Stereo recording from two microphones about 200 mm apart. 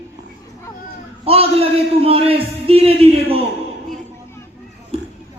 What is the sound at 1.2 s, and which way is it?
A man's voice, 30° right (ahead or behind).